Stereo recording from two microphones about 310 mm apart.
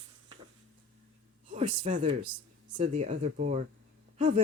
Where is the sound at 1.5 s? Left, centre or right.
Right.